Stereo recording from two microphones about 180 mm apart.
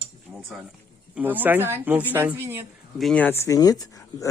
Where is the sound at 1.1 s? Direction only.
10° right (ahead or behind).